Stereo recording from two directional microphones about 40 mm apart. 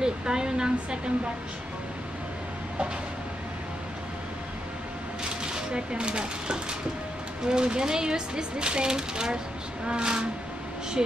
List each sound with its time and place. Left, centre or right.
0.0 s speech: centre
5.4 s speech: right